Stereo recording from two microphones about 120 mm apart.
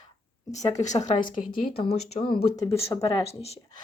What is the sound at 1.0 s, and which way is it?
Speech, 90° left.